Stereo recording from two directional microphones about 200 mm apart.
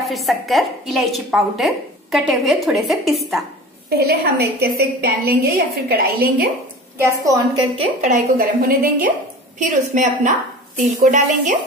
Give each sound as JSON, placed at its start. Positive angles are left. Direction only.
{"t": 0.0, "sound": "a woman's voice", "side_deg": 0}
{"t": 4.0, "sound": "a woman's voice", "side_deg": -50}
{"t": 7.2, "sound": "a woman's voice", "side_deg": -25}
{"t": 8.0, "sound": "a woman's voice", "side_deg": -45}